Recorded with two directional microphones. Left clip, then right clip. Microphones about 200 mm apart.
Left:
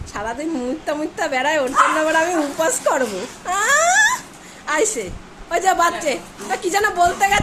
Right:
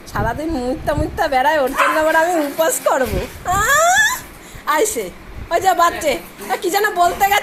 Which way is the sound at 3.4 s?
Centre (ahead or behind).